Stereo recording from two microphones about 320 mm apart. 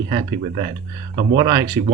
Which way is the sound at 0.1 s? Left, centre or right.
Centre.